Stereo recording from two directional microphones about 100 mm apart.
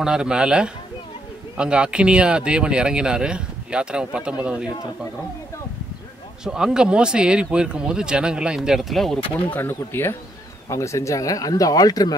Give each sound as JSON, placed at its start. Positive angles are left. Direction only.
{"t": 0.0, "sound": "speech", "side_deg": -10}
{"t": 6.4, "sound": "speech", "side_deg": -5}
{"t": 9.5, "sound": "speech", "side_deg": 20}